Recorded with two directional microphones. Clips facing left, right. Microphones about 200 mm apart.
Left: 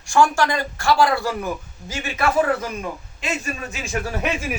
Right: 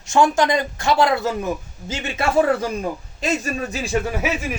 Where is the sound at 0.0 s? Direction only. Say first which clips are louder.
Right 1 dB; 20° right (ahead or behind).